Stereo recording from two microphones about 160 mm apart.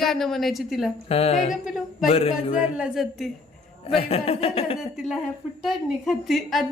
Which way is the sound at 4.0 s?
40° left (ahead or behind).